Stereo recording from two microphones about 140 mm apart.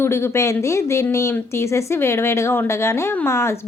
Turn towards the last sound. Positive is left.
turn(degrees=20)  # may be behind; listen again after turning